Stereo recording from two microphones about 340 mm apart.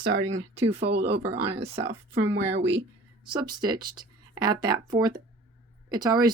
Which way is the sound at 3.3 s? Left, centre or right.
Centre.